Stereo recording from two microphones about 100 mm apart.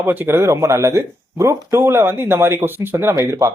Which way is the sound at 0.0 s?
20° right (ahead or behind).